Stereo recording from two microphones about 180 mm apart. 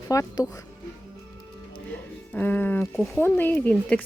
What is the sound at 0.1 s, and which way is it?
Speech, 20° left (ahead or behind).